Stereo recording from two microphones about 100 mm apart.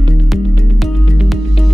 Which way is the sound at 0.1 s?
Centre (ahead or behind).